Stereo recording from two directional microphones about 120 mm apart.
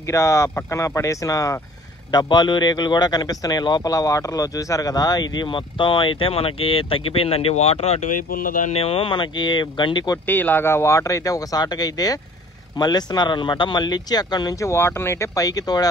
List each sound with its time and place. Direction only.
0.0 s speech: 25° left (ahead or behind)
2.0 s a man's voice: 40° left (ahead or behind); by 8.8 s 90° left
8.8 s a man's voice: 45° left (ahead or behind)
10.1 s a man's voice: 15° left (ahead or behind); by 15.9 s 30° left (ahead or behind)